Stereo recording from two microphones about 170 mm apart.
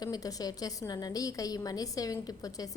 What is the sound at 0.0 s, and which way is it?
A woman's voice, 20° left (ahead or behind).